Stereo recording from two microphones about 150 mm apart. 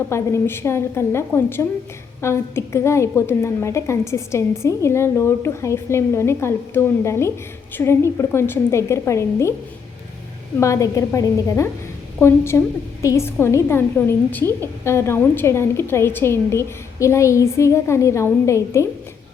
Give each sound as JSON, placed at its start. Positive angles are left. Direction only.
{"t": 0.1, "sound": "a woman's voice", "side_deg": 15}
{"t": 10.6, "sound": "a woman's voice", "side_deg": 20}